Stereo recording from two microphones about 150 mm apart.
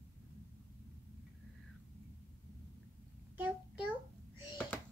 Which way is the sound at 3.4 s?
10° right (ahead or behind).